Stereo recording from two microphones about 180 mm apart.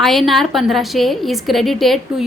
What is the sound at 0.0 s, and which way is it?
A woman's voice, centre (ahead or behind).